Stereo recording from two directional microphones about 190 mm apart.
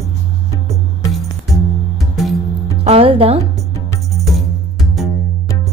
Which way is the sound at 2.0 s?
Centre (ahead or behind).